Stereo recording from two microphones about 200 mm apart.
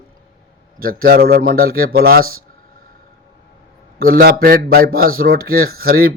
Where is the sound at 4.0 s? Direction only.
50° right (ahead or behind).